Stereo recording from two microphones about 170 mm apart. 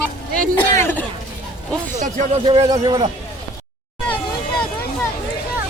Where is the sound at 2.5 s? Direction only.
25° right (ahead or behind).